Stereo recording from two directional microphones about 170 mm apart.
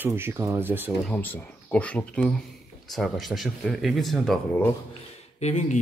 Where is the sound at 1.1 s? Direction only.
10° left (ahead or behind).